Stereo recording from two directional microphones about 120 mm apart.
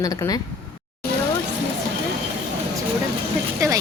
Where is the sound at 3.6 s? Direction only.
25° right (ahead or behind).